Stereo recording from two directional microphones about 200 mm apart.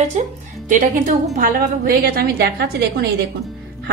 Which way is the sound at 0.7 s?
40° right (ahead or behind).